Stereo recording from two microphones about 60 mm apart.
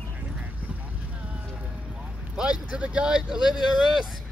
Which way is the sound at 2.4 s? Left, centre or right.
Centre.